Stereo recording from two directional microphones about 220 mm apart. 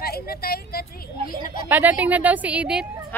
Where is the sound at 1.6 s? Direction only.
10° right (ahead or behind).